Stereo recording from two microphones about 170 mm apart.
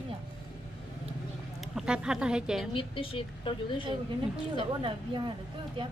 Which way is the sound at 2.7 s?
30° left (ahead or behind).